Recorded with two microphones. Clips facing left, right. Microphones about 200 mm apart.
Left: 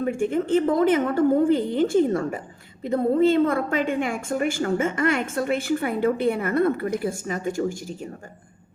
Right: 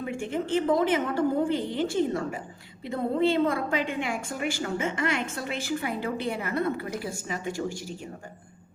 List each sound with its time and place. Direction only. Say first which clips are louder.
0.0 s a woman's voice: left 7 dB; 50° left (ahead or behind)